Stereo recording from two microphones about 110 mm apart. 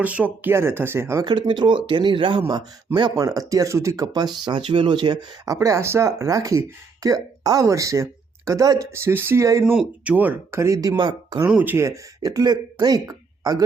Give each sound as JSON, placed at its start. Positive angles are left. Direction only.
{"t": 0.0, "sound": "speech", "side_deg": -15}
{"t": 1.2, "sound": "speech", "side_deg": -45}
{"t": 9.7, "sound": "speech", "side_deg": -10}
{"t": 11.4, "sound": "speech", "side_deg": -15}